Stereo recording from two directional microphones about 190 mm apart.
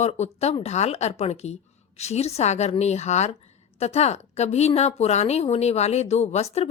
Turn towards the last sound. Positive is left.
turn(degrees=35)  # may be behind; listen again after turning